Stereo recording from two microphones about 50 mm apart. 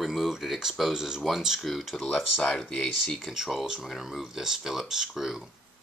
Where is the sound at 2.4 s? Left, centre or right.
Centre.